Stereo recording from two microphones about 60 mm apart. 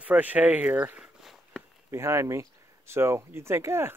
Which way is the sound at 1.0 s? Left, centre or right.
Centre.